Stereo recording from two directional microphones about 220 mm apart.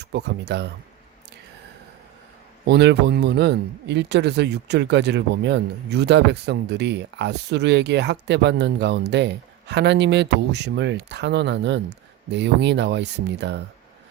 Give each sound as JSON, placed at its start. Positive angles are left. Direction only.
{"t": 0.0, "sound": "speech", "side_deg": -50}
{"t": 2.6, "sound": "speech", "side_deg": -50}